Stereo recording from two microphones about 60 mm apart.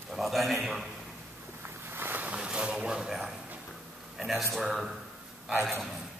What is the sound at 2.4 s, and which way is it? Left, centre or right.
A man's voice, centre.